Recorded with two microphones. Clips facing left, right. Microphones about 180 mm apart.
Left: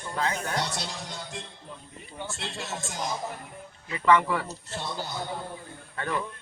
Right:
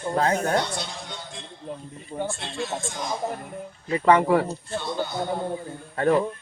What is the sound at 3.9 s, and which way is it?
Speech, 45° right (ahead or behind).